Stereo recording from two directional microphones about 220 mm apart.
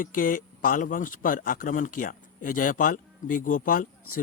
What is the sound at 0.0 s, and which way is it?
A man's voice, 40° left (ahead or behind).